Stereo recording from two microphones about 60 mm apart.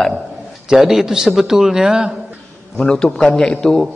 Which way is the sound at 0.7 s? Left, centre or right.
Centre.